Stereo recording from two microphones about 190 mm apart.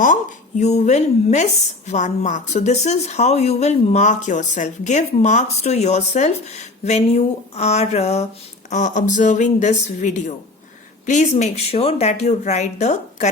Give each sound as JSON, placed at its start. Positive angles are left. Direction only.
{"t": 0.0, "sound": "speech", "side_deg": 40}